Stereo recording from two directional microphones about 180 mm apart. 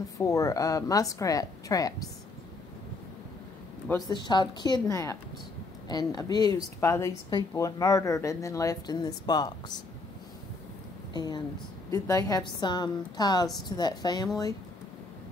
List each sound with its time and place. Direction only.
0.2 s a woman's voice: 15° left (ahead or behind)
4.1 s a woman's voice: 25° left (ahead or behind)
11.1 s a woman's voice: 25° left (ahead or behind)